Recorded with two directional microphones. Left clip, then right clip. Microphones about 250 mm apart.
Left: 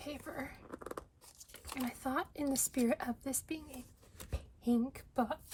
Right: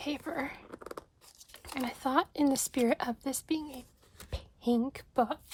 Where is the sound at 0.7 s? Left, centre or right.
Centre.